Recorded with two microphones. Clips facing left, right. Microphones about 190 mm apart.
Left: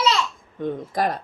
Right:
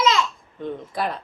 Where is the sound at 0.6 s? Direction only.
45° left (ahead or behind).